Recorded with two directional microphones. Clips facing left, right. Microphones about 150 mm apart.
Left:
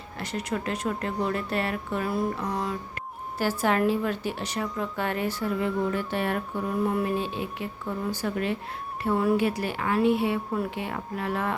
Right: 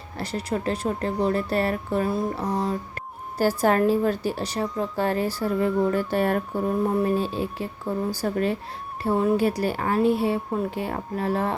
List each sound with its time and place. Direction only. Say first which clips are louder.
0.2 s a woman's voice: right 3 dB; 35° right (ahead or behind)